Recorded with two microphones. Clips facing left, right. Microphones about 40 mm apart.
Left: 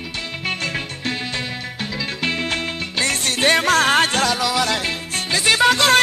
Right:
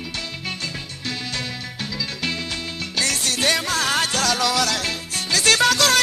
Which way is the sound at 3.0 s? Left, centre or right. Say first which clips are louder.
Left 3 dB; left.